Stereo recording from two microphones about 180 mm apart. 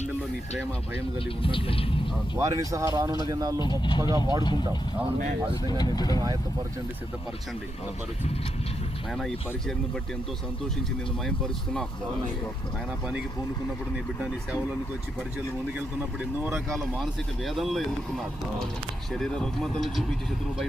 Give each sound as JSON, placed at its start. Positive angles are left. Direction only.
{"t": 1.4, "sound": "speech", "side_deg": 30}
{"t": 2.3, "sound": "speech", "side_deg": -20}
{"t": 3.6, "sound": "speech", "side_deg": 25}
{"t": 5.6, "sound": "speech", "side_deg": 20}
{"t": 9.1, "sound": "speech", "side_deg": 0}
{"t": 11.3, "sound": "speech", "side_deg": 5}
{"t": 13.9, "sound": "speech", "side_deg": -5}
{"t": 16.0, "sound": "speech", "side_deg": -15}
{"t": 17.0, "sound": "speech", "side_deg": 0}
{"t": 19.1, "sound": "speech", "side_deg": 5}